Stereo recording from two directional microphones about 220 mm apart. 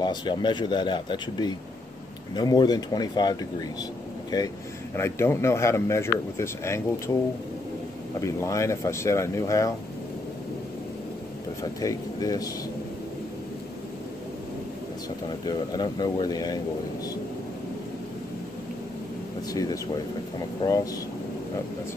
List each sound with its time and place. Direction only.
0.0 s speech: 20° left (ahead or behind)
4.9 s speech: 10° left (ahead or behind)
8.2 s speech: 15° left (ahead or behind)
11.8 s speech: 15° left (ahead or behind)
15.4 s speech: 20° left (ahead or behind)
19.5 s speech: 15° left (ahead or behind)